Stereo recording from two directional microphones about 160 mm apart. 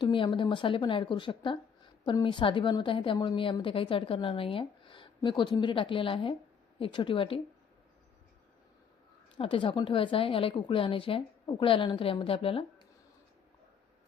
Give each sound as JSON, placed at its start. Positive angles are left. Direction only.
{"t": 0.0, "sound": "a woman's voice", "side_deg": 30}
{"t": 9.4, "sound": "a woman's voice", "side_deg": 35}